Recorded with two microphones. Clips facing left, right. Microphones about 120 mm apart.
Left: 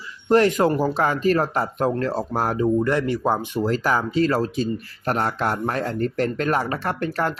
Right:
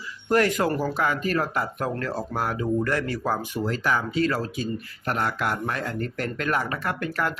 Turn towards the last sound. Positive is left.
turn(degrees=30)  # may be behind; listen again after turning